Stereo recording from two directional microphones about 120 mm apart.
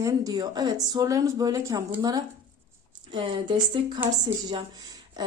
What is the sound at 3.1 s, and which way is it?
Speech, 45° right (ahead or behind).